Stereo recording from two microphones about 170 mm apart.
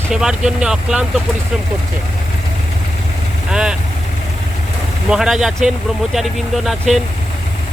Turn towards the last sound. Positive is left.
turn(degrees=0)  # may be behind; listen again after turning